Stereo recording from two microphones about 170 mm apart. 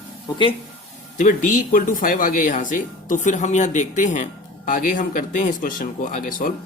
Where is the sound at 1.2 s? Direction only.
50° left (ahead or behind).